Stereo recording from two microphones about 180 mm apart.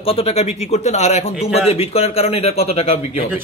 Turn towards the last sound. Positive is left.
turn(degrees=35)  # may be behind; listen again after turning